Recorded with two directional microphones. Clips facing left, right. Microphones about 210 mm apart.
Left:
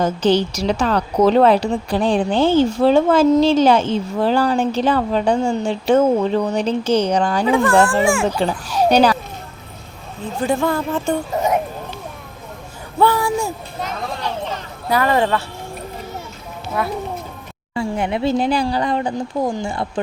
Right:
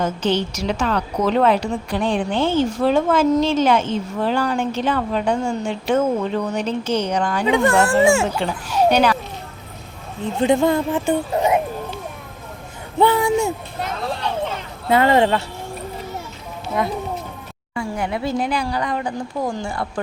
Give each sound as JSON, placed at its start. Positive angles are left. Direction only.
{"t": 0.0, "sound": "a woman's voice", "side_deg": 35}
{"t": 7.4, "sound": "speech", "side_deg": -20}
{"t": 8.4, "sound": "a woman's voice", "side_deg": 35}
{"t": 10.2, "sound": "speech", "side_deg": -20}
{"t": 13.0, "sound": "a sound", "side_deg": -20}
{"t": 14.8, "sound": "speech", "side_deg": -25}
{"t": 16.8, "sound": "speech", "side_deg": -20}
{"t": 17.7, "sound": "speech", "side_deg": 25}